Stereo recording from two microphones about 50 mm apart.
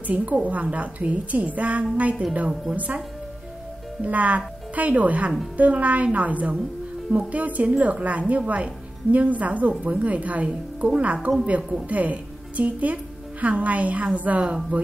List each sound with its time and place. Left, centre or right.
0.0 s a woman's voice: right
4.0 s a woman's voice: right
11.9 s a woman's voice: right